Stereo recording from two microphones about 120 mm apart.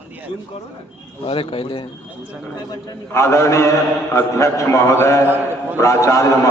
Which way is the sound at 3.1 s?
25° left (ahead or behind).